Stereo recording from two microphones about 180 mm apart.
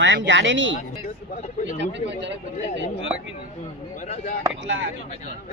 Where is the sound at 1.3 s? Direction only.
40° left (ahead or behind).